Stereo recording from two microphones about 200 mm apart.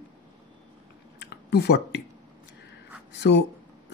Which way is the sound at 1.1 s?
55° left (ahead or behind).